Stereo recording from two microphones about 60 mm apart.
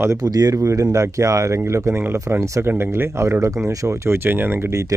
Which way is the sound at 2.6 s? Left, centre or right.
Right.